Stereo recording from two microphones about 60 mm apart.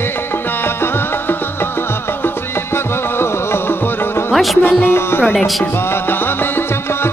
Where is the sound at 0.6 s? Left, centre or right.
Left.